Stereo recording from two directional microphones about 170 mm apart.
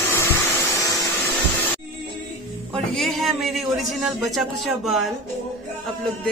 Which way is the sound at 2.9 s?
Centre (ahead or behind).